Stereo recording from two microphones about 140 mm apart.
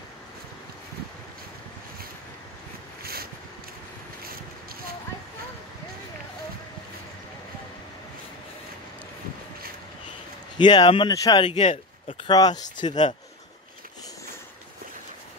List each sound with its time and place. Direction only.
3.0 s a sound: 90° right
10.6 s speech: 30° left (ahead or behind)
11.5 s speech: 55° left (ahead or behind)
12.3 s speech: 30° left (ahead or behind)